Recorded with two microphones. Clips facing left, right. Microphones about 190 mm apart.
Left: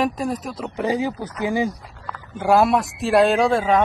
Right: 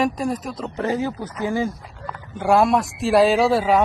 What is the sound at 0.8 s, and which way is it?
Speech, 15° left (ahead or behind).